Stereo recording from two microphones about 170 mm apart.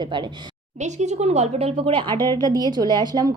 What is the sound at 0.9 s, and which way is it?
A woman's voice, 40° right (ahead or behind).